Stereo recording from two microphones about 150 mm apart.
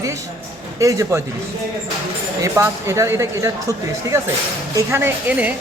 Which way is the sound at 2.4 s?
20° right (ahead or behind).